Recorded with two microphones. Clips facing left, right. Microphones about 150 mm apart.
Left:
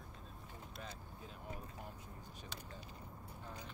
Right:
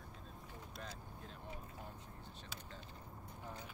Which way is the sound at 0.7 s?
5° left (ahead or behind).